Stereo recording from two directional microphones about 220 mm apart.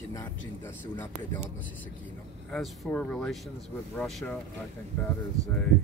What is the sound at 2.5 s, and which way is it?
Speech, 5° left (ahead or behind).